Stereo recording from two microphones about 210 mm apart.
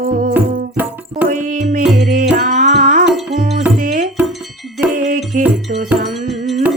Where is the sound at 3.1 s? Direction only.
Centre (ahead or behind).